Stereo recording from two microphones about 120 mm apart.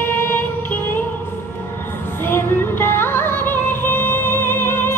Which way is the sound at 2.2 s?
20° left (ahead or behind).